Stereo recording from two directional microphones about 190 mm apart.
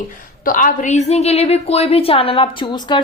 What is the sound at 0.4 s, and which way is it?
A woman's voice, 45° left (ahead or behind).